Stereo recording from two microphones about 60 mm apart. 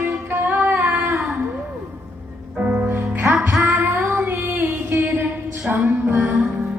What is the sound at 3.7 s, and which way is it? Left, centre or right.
Child singing, right.